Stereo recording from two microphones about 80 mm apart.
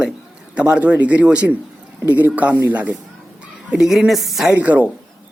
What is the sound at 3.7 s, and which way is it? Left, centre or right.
Speech, centre.